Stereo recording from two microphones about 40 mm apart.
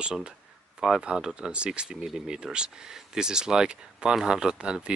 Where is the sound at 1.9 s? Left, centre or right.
Centre.